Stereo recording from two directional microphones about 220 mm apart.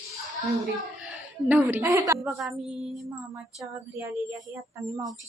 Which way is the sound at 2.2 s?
Centre (ahead or behind).